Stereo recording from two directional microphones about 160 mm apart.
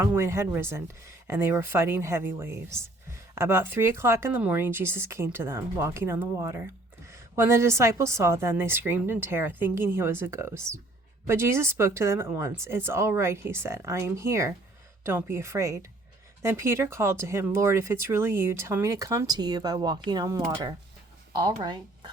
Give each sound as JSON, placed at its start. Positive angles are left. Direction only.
{"t": 0.0, "sound": "a woman's voice", "side_deg": -15}